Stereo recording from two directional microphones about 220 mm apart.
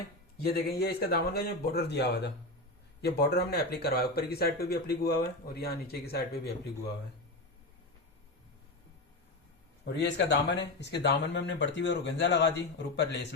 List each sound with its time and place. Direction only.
0.4 s speech: 45° left (ahead or behind)
9.8 s speech: 50° left (ahead or behind)